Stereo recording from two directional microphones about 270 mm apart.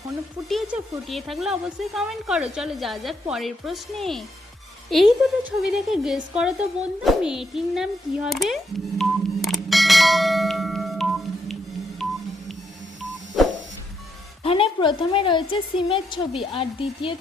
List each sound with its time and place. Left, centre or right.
0.4 s speech: centre
9.0 s bell: centre
12.0 s telephone dialing: centre
13.4 s a sound: centre
14.4 s a woman's voice: centre